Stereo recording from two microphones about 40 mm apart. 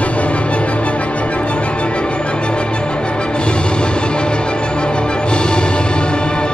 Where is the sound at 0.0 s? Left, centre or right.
Left.